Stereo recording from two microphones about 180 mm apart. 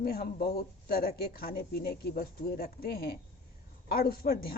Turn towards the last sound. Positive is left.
turn(degrees=55)  # may be behind; listen again after turning